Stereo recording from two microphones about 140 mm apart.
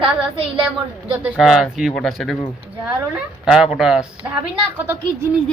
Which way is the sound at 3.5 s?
5° right (ahead or behind).